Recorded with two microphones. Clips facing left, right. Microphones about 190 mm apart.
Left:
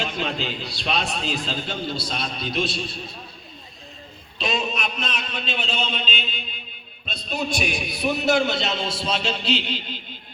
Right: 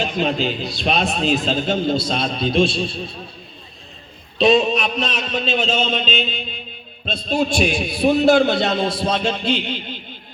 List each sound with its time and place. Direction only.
0.0 s a man's voice: 15° right (ahead or behind)
4.4 s a man's voice: 35° right (ahead or behind)
8.4 s a man's voice: 55° right (ahead or behind)